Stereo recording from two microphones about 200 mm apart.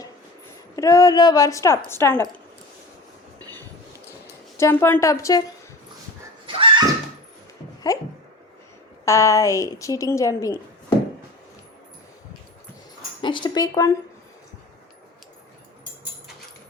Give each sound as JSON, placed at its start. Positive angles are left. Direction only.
{"t": 0.8, "sound": "a woman's voice", "side_deg": 15}
{"t": 3.3, "sound": "train", "side_deg": -20}
{"t": 4.5, "sound": "a woman's voice", "side_deg": 10}
{"t": 6.4, "sound": "a sound", "side_deg": -25}
{"t": 7.9, "sound": "a woman's voice", "side_deg": 15}
{"t": 9.0, "sound": "a woman's voice", "side_deg": 15}
{"t": 13.2, "sound": "speech", "side_deg": 20}